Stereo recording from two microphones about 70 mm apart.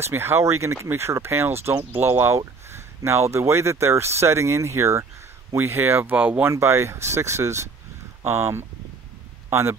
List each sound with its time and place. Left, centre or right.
0.0 s speech: right
6.1 s speech: right
6.4 s speech: right